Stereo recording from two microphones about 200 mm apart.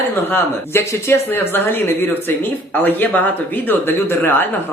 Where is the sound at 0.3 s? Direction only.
10° left (ahead or behind).